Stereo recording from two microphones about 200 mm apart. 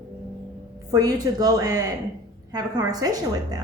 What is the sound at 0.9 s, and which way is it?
A woman's voice, 15° right (ahead or behind).